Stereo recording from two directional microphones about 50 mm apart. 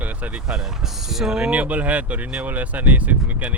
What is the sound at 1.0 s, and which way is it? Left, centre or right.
Speech, centre.